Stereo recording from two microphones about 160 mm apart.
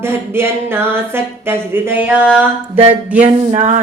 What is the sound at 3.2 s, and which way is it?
Music, 45° right (ahead or behind).